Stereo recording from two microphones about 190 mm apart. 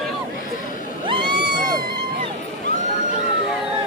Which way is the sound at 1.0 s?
25° right (ahead or behind).